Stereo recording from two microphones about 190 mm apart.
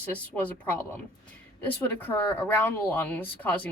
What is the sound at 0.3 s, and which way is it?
Speech, 10° left (ahead or behind).